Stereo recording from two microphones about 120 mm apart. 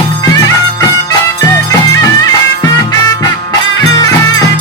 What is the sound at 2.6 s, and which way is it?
Music, 30° left (ahead or behind).